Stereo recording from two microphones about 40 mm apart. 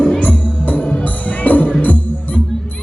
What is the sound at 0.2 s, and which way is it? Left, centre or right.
Music, left.